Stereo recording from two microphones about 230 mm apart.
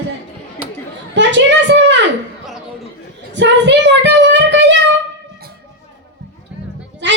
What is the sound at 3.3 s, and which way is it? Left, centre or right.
Child singing, right.